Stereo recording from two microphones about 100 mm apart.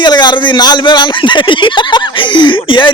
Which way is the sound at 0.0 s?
45° left (ahead or behind).